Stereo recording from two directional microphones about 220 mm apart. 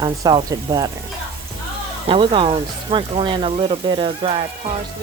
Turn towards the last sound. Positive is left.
turn(degrees=-25)  # may be behind; listen again after turning